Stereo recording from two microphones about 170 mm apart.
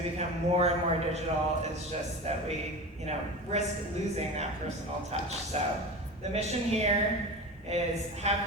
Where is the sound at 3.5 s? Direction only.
40° right (ahead or behind).